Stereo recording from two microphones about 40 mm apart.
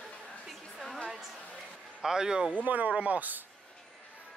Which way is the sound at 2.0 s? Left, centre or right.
Centre.